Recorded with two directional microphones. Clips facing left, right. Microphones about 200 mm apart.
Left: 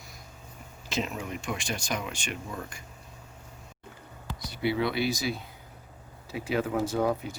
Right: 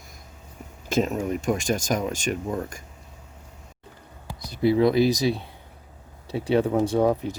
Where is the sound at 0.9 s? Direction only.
45° right (ahead or behind).